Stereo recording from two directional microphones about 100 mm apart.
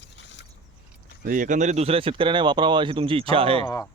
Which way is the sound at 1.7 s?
85° right.